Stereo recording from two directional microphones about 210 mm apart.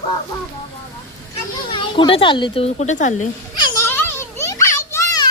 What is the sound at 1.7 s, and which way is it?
Speech, 25° left (ahead or behind).